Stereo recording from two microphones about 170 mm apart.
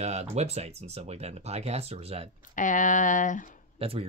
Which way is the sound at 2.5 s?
50° left (ahead or behind).